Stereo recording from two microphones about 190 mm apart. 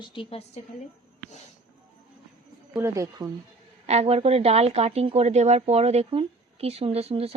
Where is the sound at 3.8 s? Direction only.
35° right (ahead or behind).